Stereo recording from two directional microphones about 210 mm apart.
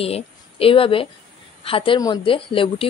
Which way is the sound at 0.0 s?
25° left (ahead or behind).